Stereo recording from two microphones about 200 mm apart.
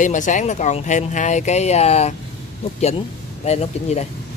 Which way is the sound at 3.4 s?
35° left (ahead or behind).